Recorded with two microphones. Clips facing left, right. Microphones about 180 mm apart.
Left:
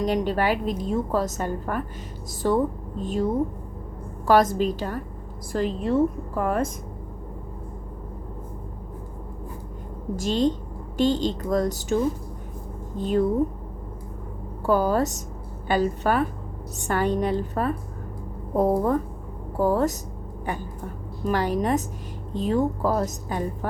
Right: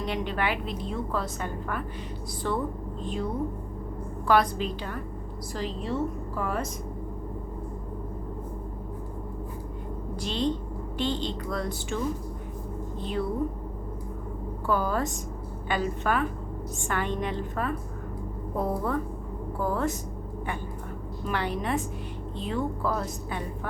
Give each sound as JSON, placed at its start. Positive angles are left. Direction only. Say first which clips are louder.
{"t": 0.0, "sound": "a woman's voice", "louder": "left 6 dB", "side_deg": 40}
{"t": 4.3, "sound": "a woman's voice", "louder": "left 5 dB", "side_deg": 45}
{"t": 10.2, "sound": "a woman's voice", "louder": "left 6 dB", "side_deg": 45}
{"t": 14.7, "sound": "a woman's voice", "louder": "left 6 dB", "side_deg": 40}
{"t": 21.2, "sound": "a woman's voice", "louder": "left 6 dB", "side_deg": 40}